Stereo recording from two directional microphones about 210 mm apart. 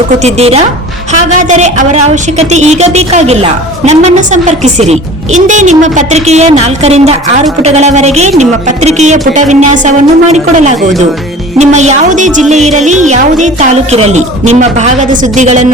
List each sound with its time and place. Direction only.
0.2 s a woman's voice: 30° right (ahead or behind)